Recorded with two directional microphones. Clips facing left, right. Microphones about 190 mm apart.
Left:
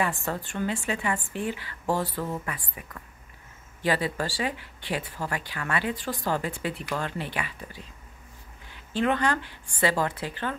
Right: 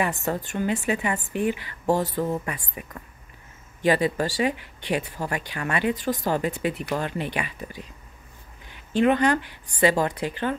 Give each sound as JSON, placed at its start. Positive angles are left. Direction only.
{"t": 0.0, "sound": "a woman's voice", "side_deg": -20}
{"t": 8.9, "sound": "speech", "side_deg": -15}